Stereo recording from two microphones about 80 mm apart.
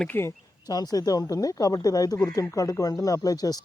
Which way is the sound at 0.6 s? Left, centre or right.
Left.